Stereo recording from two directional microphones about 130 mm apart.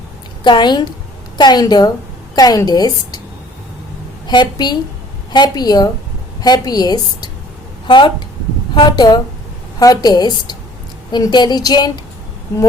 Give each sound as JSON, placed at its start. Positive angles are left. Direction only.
{"t": 0.4, "sound": "a woman's voice", "side_deg": 35}
{"t": 4.3, "sound": "a woman's voice", "side_deg": 35}